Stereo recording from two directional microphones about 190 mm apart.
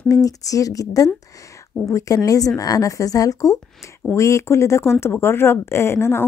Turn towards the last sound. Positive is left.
turn(degrees=15)  # may be behind; listen again after turning